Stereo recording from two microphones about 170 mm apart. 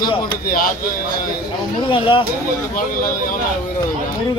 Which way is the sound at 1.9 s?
30° left (ahead or behind).